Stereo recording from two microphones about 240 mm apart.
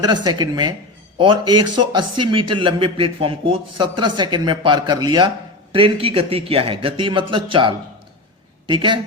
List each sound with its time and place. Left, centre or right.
0.0 s a man's voice: centre